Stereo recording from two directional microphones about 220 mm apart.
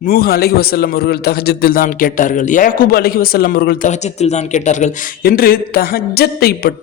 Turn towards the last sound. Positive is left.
turn(degrees=45)  # may be behind; listen again after turning